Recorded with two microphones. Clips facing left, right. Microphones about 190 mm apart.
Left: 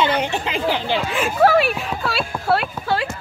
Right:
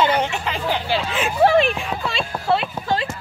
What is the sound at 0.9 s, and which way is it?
Speech, 10° left (ahead or behind).